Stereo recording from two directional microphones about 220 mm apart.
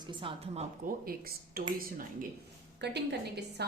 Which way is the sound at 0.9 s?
40° right (ahead or behind).